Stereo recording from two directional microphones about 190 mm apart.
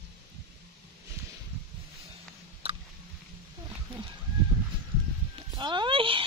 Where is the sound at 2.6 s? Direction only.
30° right (ahead or behind).